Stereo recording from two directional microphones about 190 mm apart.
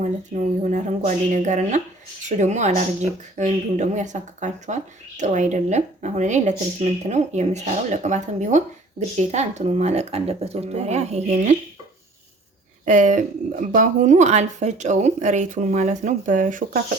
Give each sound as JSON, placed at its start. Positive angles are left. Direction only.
{"t": 0.6, "sound": "speech", "side_deg": -40}
{"t": 12.8, "sound": "speech", "side_deg": -40}